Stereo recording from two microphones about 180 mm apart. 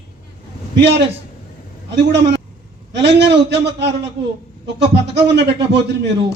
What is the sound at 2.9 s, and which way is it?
Speech, 70° right (ahead or behind).